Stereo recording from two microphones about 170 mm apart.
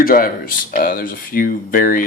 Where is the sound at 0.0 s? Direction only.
55° left (ahead or behind).